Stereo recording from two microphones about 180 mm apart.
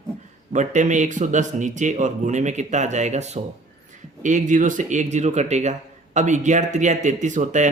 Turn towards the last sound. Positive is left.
turn(degrees=-45)  # may be behind; listen again after turning